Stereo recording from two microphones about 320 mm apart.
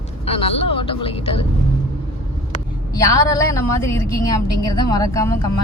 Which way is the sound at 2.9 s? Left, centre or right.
Centre.